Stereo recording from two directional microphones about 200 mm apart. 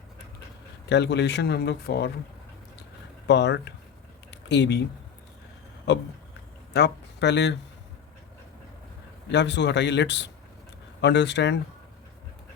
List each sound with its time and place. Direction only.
0.9 s speech: 60° left (ahead or behind)
3.2 s speech: 60° left (ahead or behind)
4.3 s a sound: 60° left (ahead or behind)
6.7 s speech: 60° left (ahead or behind)
9.3 s speech: 60° left (ahead or behind)